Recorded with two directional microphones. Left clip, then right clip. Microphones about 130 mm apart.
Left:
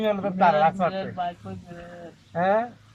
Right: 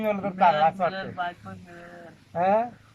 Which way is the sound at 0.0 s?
Centre (ahead or behind).